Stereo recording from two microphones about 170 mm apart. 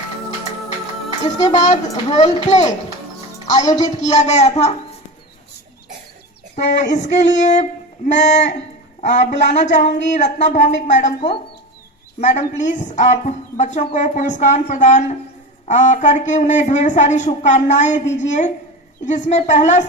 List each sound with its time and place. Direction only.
1.5 s speech: 45° left (ahead or behind)
3.8 s speech: 45° left (ahead or behind)
6.6 s speech: 45° left (ahead or behind)
7.3 s a sound: 45° left (ahead or behind)
9.0 s speech: 45° left (ahead or behind)
12.2 s speech: 45° left (ahead or behind)